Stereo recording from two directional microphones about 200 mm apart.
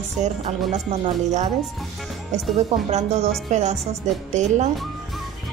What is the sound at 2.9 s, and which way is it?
Speech, 35° right (ahead or behind).